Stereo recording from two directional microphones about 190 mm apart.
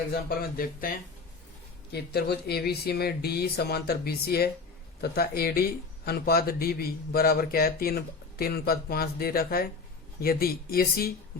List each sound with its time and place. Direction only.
0.1 s a man's voice: 50° left (ahead or behind)